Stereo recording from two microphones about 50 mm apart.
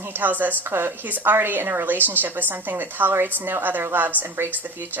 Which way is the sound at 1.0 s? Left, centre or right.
Right.